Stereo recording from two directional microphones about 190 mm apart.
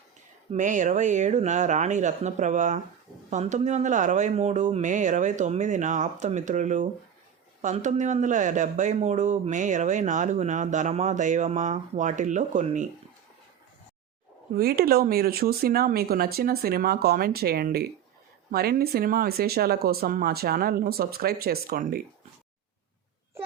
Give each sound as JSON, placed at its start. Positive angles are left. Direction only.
{"t": 0.5, "sound": "speech", "side_deg": -40}
{"t": 14.5, "sound": "speech", "side_deg": -55}